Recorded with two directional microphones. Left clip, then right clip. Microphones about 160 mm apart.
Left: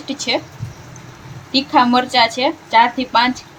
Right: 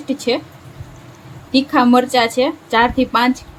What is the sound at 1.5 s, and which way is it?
A woman's voice, 65° right (ahead or behind).